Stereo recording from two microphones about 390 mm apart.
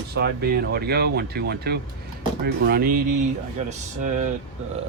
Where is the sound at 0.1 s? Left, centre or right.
Right.